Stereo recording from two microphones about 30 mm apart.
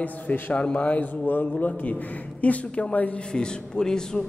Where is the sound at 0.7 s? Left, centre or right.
Left.